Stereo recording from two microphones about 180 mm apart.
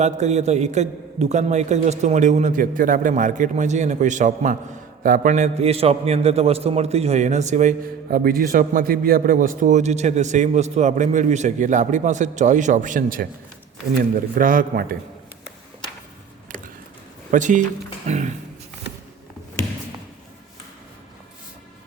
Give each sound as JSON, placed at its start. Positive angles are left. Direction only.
{"t": 0.0, "sound": "a man's voice", "side_deg": -40}
{"t": 14.3, "sound": "a man's voice", "side_deg": -50}
{"t": 17.3, "sound": "a man's voice", "side_deg": -45}